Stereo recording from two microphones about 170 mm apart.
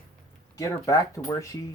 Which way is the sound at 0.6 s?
20° left (ahead or behind).